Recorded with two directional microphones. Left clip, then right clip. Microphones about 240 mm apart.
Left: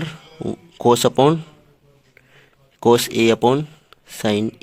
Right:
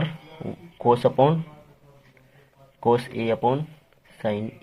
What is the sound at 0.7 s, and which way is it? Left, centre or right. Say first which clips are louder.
Speech: left 4 dB; left.